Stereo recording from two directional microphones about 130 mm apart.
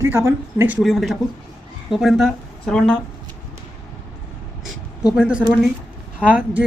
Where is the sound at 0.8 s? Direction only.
Centre (ahead or behind).